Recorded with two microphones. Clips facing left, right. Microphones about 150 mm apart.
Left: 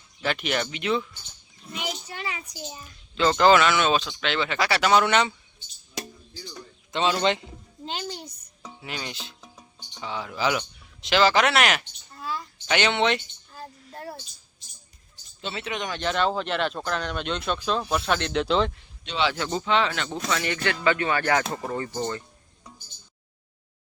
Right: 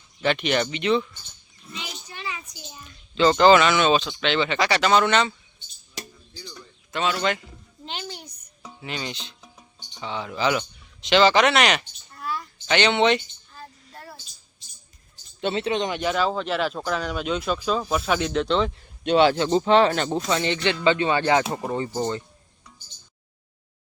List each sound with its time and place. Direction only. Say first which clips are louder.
0.2 s speech: right 4 dB; 5° left (ahead or behind)
2.8 s speech: right 4 dB; centre (ahead or behind)
6.9 s a man's voice: left 1 dB; 20° left (ahead or behind)
7.9 s a child's voice: left 2 dB; 35° left (ahead or behind)
8.8 s speech: right 3 dB; centre (ahead or behind)
12.1 s a sound: right 2 dB; 25° left (ahead or behind)
12.6 s speech: right 3 dB; 5° left (ahead or behind)
13.9 s a sound: left 7 dB; 40° left (ahead or behind)
15.5 s speech: right 7 dB; 30° right (ahead or behind)
15.9 s speech: right 1 dB; 10° right (ahead or behind)
19.0 s speech: right 9 dB; 50° right (ahead or behind)
19.4 s speech: right 7 dB; 30° right (ahead or behind)